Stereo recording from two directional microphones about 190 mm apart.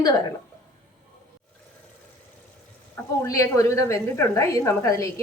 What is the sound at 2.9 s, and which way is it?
A woman's voice, 15° left (ahead or behind).